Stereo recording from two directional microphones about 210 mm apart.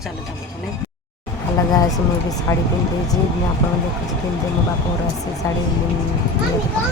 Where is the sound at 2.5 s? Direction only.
10° left (ahead or behind).